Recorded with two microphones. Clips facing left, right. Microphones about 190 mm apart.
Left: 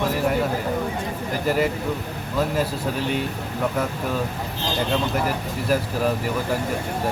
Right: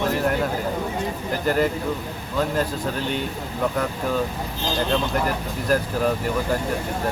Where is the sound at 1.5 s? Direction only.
5° left (ahead or behind).